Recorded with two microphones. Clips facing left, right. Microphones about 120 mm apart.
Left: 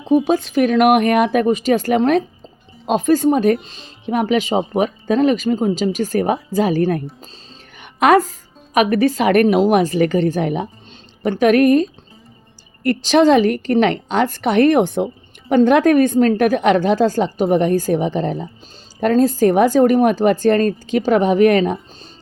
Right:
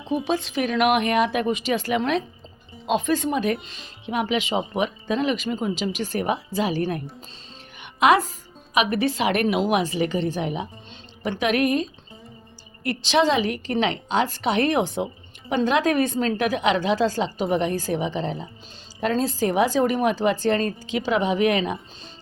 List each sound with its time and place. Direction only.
0.1 s a woman's voice: 45° left (ahead or behind)
7.8 s music: 45° left (ahead or behind)
8.7 s a woman's voice: 45° left (ahead or behind)